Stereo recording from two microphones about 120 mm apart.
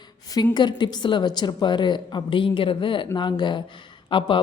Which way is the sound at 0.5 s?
40° left (ahead or behind).